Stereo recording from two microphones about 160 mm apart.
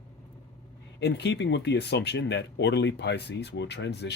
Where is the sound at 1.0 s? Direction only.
90° left.